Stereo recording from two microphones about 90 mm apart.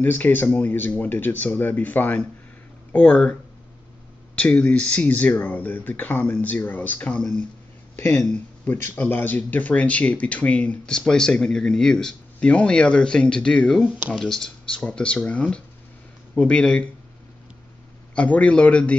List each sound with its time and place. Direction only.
0.0 s speech: 20° left (ahead or behind)
4.4 s speech: 15° left (ahead or behind)
18.1 s speech: 15° left (ahead or behind)